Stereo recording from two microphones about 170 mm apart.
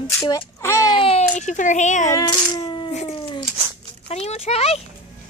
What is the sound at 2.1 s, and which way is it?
Coin, 25° left (ahead or behind).